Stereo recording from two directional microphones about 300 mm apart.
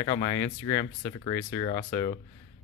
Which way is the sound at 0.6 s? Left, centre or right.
Centre.